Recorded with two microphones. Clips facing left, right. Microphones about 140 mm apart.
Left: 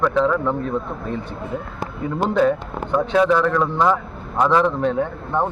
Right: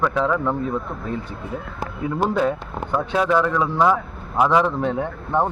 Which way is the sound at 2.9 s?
5° right (ahead or behind).